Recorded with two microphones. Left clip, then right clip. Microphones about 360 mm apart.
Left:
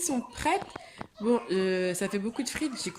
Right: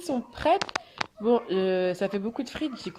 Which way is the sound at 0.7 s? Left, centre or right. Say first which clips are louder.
Right 11 dB; right.